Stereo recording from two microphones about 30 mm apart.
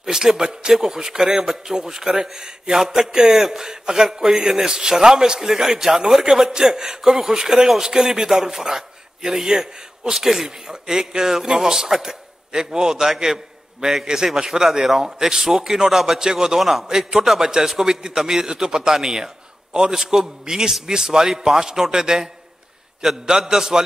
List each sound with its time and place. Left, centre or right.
0.0 s a man's voice: centre
10.1 s a man's voice: centre
10.7 s a man's voice: centre
13.0 s a man's voice: centre
14.0 s a man's voice: right
16.2 s a man's voice: right
16.5 s a man's voice: centre
17.4 s a man's voice: centre